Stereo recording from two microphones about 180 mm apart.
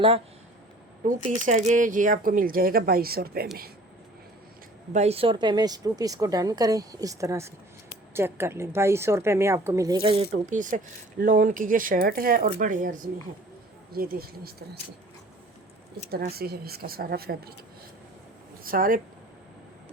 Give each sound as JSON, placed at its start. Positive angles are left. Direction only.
{"t": 1.0, "sound": "speech", "side_deg": -40}
{"t": 4.9, "sound": "a woman's voice", "side_deg": -35}
{"t": 10.3, "sound": "speech", "side_deg": -45}
{"t": 16.0, "sound": "speech", "side_deg": -60}
{"t": 18.6, "sound": "speech", "side_deg": -50}